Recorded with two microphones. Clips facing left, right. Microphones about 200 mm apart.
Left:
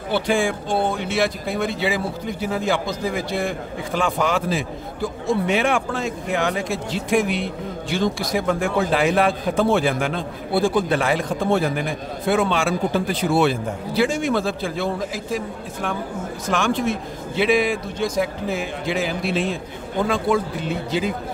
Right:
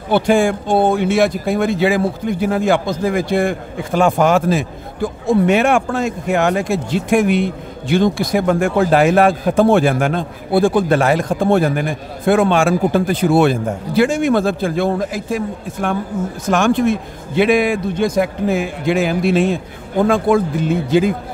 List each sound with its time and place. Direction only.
0.1 s speech: 45° right (ahead or behind)